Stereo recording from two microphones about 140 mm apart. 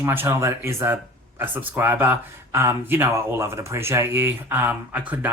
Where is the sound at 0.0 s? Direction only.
15° right (ahead or behind).